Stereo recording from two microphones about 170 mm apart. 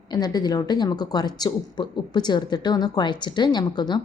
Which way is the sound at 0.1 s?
25° left (ahead or behind).